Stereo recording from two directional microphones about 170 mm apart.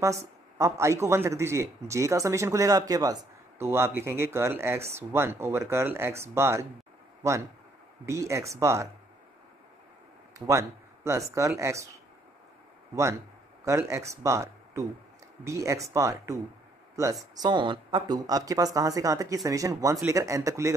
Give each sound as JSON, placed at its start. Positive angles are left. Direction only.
{"t": 0.6, "sound": "speech", "side_deg": -15}
{"t": 10.4, "sound": "speech", "side_deg": -15}
{"t": 13.7, "sound": "speech", "side_deg": -15}